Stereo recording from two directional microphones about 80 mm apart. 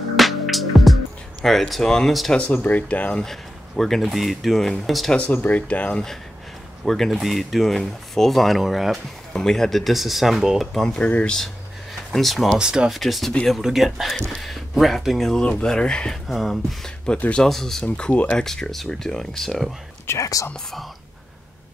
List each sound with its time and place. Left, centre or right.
0.1 s music: centre
1.4 s speech: centre
2.3 s speech: centre
5.1 s speech: centre
6.8 s speech: centre
12.1 s speech: centre
12.5 s speech: centre
17.8 s speech: centre
18.4 s speech: centre
20.1 s speech: left